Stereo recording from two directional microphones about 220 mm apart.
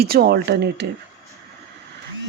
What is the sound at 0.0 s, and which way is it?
Speech, 45° right (ahead or behind).